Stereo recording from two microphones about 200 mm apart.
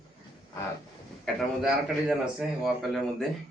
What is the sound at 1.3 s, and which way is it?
Speech, 5° left (ahead or behind).